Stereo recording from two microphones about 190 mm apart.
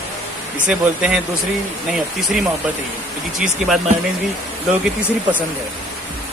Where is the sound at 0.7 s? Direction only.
5° right (ahead or behind).